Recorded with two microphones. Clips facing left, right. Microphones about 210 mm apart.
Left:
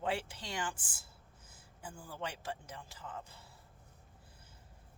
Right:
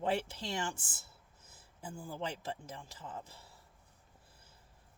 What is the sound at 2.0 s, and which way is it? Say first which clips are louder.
Speech: right 3 dB; 25° right (ahead or behind).